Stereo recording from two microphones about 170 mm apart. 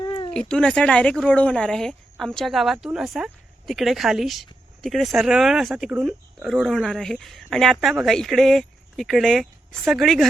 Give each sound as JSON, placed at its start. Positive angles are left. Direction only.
{"t": 0.0, "sound": "cat", "side_deg": 25}
{"t": 0.3, "sound": "speech", "side_deg": 5}